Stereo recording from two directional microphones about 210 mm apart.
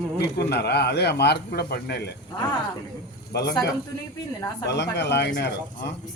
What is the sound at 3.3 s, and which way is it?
Speech, 50° left (ahead or behind).